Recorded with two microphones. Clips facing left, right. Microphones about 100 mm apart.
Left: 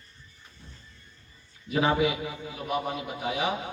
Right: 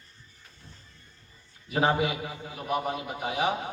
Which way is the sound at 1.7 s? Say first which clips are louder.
Left 1 dB; 35° right (ahead or behind).